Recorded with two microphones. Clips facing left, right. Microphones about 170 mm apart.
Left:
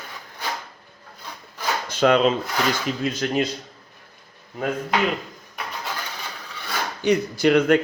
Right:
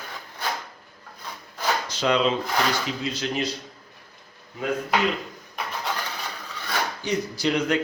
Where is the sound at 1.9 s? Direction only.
55° left (ahead or behind).